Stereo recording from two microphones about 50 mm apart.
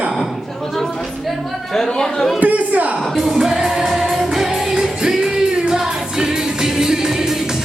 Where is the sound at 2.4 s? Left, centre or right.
Right.